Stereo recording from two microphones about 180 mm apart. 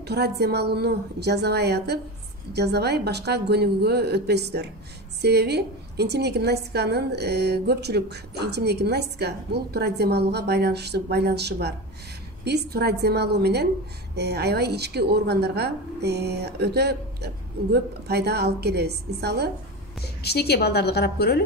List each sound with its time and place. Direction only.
0.0 s a woman's voice: 65° right (ahead or behind)
20.0 s a woman's voice: 65° left (ahead or behind)